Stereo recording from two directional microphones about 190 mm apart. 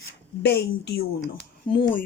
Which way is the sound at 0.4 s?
60° left (ahead or behind).